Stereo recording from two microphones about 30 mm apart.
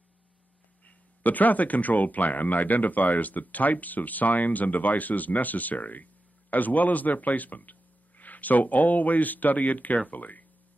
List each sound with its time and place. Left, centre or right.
1.2 s speech: left